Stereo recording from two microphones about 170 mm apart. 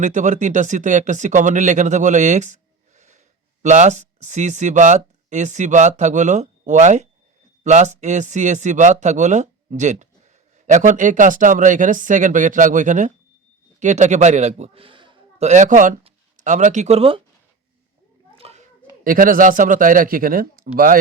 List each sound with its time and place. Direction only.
0.0 s a man's voice: 45° right (ahead or behind); by 15.4 s 30° right (ahead or behind)
15.4 s speech: 45° right (ahead or behind)
18.3 s children playing: 35° right (ahead or behind)
19.0 s speech: 55° right (ahead or behind)